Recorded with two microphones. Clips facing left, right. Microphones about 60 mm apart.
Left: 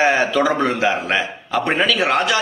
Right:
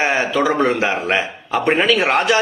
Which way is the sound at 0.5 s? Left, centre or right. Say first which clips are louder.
Right 1 dB; right.